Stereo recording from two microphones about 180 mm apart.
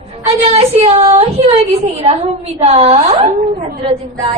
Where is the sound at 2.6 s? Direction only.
35° right (ahead or behind).